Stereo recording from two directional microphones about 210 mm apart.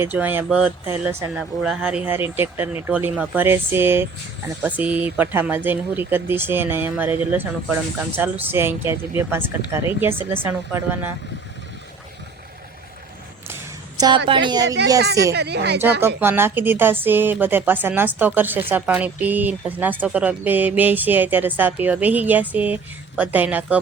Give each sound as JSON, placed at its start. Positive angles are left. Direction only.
{"t": 0.0, "sound": "speech", "side_deg": -10}
{"t": 14.3, "sound": "speech", "side_deg": -20}
{"t": 15.3, "sound": "speech", "side_deg": -50}
{"t": 16.0, "sound": "speech", "side_deg": -10}